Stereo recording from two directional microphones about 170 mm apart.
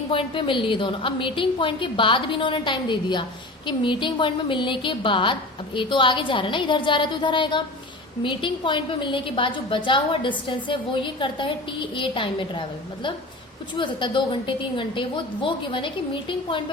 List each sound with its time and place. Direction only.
0.1 s a woman's voice: 30° left (ahead or behind)